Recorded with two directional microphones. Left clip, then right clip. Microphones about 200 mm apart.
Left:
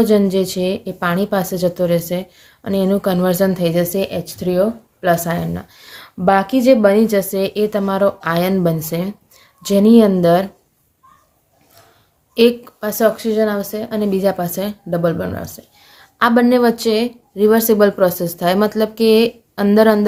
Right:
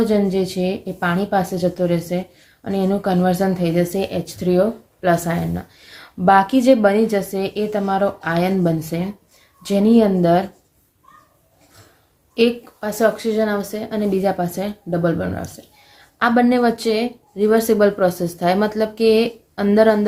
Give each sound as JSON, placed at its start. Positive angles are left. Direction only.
{"t": 0.0, "sound": "speech", "side_deg": 40}
{"t": 12.3, "sound": "speech", "side_deg": 35}